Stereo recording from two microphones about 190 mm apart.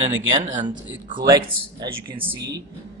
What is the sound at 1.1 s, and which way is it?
Speech, 20° right (ahead or behind).